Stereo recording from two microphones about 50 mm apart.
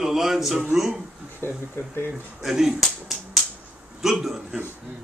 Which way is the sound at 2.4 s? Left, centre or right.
Centre.